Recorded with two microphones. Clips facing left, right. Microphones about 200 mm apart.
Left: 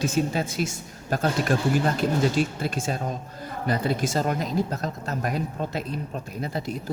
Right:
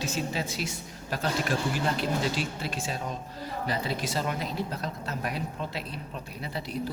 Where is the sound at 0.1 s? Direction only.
50° left (ahead or behind).